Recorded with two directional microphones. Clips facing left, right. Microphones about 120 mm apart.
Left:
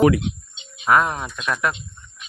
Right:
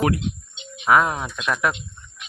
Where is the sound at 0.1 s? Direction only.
90° left.